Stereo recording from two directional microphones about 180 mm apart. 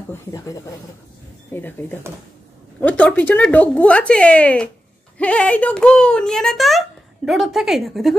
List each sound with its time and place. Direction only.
0.1 s a child's voice: 20° left (ahead or behind); by 8.2 s centre (ahead or behind)